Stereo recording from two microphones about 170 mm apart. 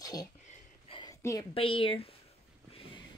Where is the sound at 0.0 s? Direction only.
20° left (ahead or behind).